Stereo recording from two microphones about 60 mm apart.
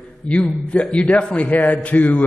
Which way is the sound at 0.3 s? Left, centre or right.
Centre.